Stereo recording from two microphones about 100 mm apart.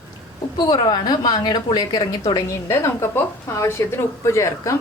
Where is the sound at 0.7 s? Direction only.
50° left (ahead or behind).